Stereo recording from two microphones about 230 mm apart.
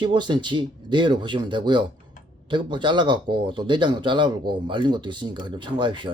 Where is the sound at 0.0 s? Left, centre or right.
Centre.